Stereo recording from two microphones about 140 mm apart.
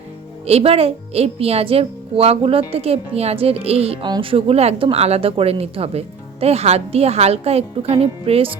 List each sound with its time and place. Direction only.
0.4 s speech: 45° right (ahead or behind)